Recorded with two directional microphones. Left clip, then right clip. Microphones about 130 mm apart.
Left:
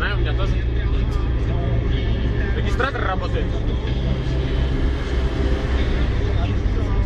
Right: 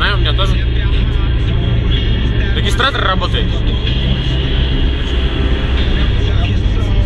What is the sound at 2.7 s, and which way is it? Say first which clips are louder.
Speech: right 9 dB; 25° right (ahead or behind).